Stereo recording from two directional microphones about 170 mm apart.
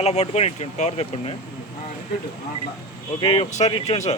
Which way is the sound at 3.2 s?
35° left (ahead or behind).